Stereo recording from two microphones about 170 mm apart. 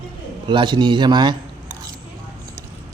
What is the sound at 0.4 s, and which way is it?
Speech, 30° right (ahead or behind).